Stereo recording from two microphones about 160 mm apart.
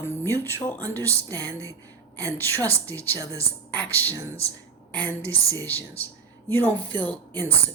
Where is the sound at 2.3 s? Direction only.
15° left (ahead or behind).